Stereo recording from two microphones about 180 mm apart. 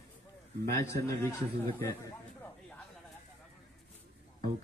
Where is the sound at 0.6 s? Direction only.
15° left (ahead or behind).